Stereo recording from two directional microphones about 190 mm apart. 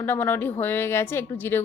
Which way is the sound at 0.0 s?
10° left (ahead or behind).